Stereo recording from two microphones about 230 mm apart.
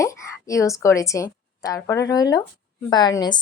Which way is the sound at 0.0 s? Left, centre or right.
Centre.